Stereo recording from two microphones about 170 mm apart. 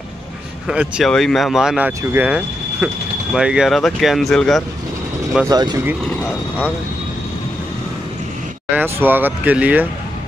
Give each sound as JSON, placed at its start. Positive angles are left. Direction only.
{"t": 0.7, "sound": "speech", "side_deg": -5}
{"t": 5.5, "sound": "speech", "side_deg": -25}
{"t": 6.0, "sound": "vehicle", "side_deg": 10}
{"t": 8.7, "sound": "speech", "side_deg": -10}